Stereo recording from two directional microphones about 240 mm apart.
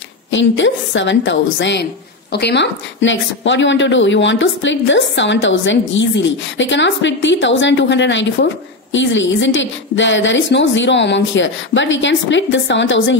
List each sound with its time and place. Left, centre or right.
0.3 s a woman's voice: left